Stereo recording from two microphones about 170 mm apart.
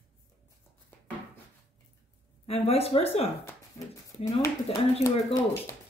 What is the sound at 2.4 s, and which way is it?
Speech, 35° left (ahead or behind).